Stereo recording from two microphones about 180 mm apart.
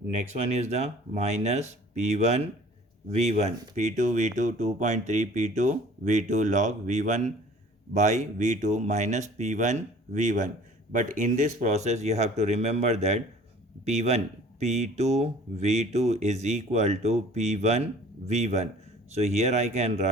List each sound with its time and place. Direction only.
0.2 s speech: 35° right (ahead or behind)